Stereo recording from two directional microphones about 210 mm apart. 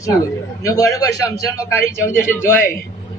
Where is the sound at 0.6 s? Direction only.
15° left (ahead or behind).